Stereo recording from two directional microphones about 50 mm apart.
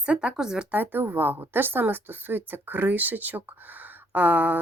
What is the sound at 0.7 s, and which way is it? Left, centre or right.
A woman's voice, right.